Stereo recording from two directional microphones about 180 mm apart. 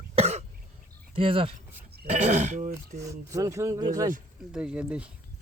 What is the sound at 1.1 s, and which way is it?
Speech, 30° right (ahead or behind).